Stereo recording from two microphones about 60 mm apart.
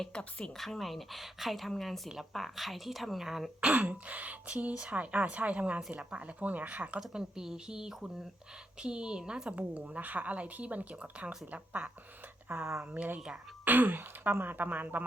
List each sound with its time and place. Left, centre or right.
0.0 s speech: centre
3.7 s a woman's voice: right
7.1 s a woman's voice: centre; by 11.9 s right
12.5 s speech: right
12.8 s a woman's voice: right
13.7 s speech: right